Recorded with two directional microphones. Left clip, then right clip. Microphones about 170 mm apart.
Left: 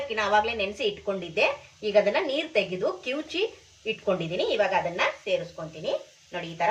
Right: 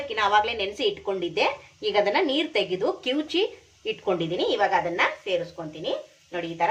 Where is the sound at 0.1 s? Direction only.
40° right (ahead or behind).